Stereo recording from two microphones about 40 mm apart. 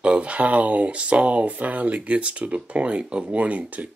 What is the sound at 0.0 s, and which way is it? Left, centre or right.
Speech, right.